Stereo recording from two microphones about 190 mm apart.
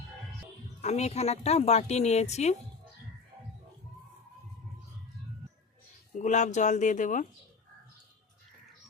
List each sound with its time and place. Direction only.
0.8 s a woman's voice: 35° left (ahead or behind)
6.1 s a woman's voice: 40° left (ahead or behind)